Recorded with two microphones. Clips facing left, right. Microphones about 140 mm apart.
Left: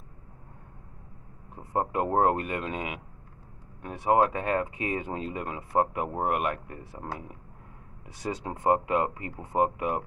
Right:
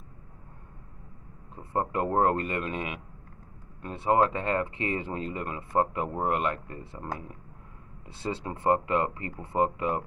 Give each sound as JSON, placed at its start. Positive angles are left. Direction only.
{"t": 1.5, "sound": "speech", "side_deg": 15}
{"t": 3.9, "sound": "speech", "side_deg": 15}
{"t": 8.1, "sound": "speech", "side_deg": 15}